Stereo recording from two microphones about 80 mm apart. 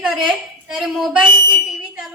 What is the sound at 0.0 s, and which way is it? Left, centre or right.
A woman's voice, centre.